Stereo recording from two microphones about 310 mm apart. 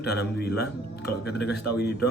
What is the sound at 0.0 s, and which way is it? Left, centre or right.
Speech, left.